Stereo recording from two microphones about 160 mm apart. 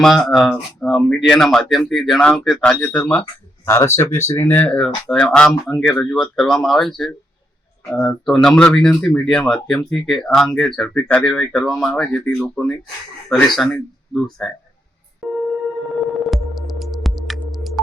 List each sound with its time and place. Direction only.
0.0 s speech: centre (ahead or behind)
15.2 s a sound: centre (ahead or behind)
16.2 s music: centre (ahead or behind)